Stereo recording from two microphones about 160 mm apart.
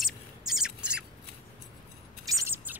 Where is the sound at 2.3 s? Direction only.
20° right (ahead or behind).